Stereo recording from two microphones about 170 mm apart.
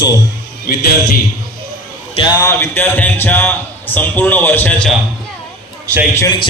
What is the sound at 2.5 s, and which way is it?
A man's voice, 15° left (ahead or behind).